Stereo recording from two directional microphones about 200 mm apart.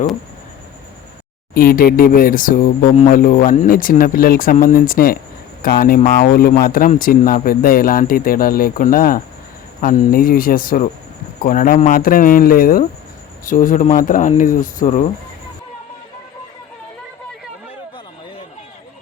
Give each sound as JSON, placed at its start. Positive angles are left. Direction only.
{"t": 1.5, "sound": "speech", "side_deg": 45}